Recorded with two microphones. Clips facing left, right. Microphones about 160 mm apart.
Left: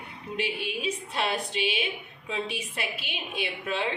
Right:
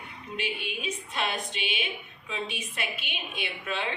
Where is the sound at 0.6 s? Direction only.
30° left (ahead or behind).